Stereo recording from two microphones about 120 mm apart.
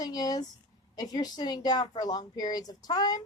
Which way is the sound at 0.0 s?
30° left (ahead or behind).